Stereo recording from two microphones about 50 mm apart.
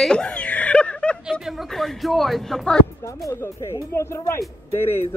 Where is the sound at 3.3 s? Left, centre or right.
Left.